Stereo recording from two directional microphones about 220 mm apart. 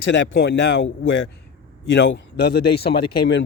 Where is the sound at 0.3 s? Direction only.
50° left (ahead or behind).